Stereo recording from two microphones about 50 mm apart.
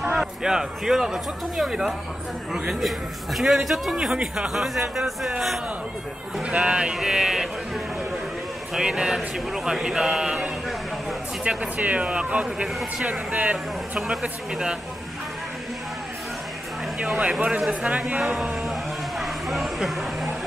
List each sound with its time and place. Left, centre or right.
0.4 s speech: centre
3.3 s a man's voice: centre
3.9 s speech: centre
6.4 s speech: right
8.7 s speech: centre
14.5 s speech: centre
17.0 s speech: centre
18.2 s a man's voice: centre
18.6 s a sound: centre